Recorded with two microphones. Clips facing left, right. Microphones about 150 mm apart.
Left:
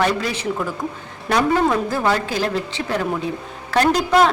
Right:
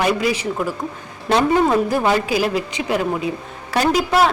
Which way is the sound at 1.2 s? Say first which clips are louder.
Right 2 dB; 20° right (ahead or behind).